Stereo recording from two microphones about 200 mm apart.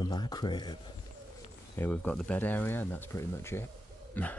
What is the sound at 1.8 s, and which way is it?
Speech, 5° left (ahead or behind).